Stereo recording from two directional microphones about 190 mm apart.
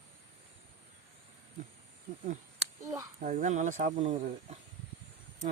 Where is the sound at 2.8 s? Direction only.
15° right (ahead or behind).